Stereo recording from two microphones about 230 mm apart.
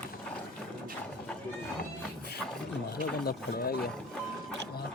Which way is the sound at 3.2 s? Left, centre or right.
Left.